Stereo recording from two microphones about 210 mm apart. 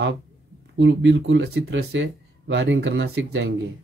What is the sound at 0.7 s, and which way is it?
Speech, 60° right (ahead or behind).